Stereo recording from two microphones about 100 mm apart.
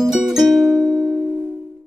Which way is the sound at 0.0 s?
5° right (ahead or behind).